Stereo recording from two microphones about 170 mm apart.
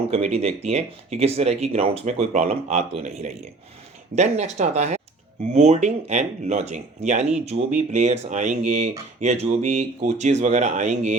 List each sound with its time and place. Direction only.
0.1 s speech: 40° right (ahead or behind)